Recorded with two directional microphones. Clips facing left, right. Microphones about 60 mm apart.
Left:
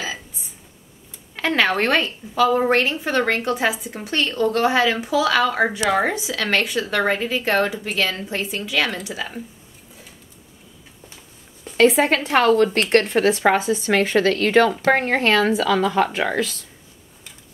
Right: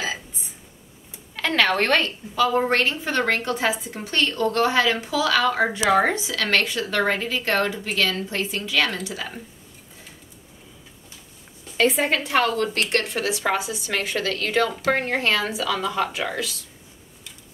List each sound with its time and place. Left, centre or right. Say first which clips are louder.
1.3 s a woman's voice: left 1 dB; centre
5.8 s a woman's voice: right 1 dB; centre
6.1 s a woman's voice: left 1 dB; left
11.7 s speech: left 5 dB; left